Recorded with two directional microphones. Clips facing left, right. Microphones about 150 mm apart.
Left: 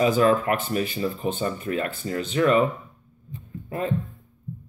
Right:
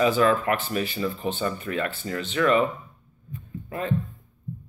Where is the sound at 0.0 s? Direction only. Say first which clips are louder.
Left 1 dB; 35° left (ahead or behind).